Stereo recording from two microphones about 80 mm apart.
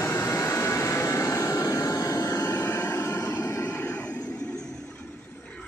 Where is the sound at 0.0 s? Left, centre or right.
Left.